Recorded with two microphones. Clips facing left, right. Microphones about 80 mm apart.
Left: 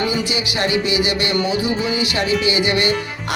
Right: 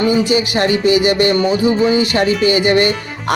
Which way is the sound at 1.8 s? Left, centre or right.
Right.